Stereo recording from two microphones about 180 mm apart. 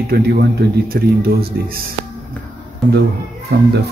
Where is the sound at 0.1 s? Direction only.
65° right (ahead or behind).